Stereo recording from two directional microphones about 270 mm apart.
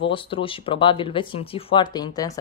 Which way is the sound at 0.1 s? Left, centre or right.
Centre.